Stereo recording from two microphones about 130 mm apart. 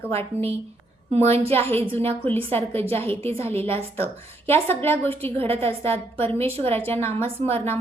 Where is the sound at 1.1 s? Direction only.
55° right (ahead or behind).